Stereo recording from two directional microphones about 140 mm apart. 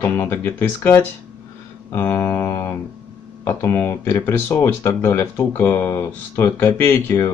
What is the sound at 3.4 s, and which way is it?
Speech, 20° left (ahead or behind).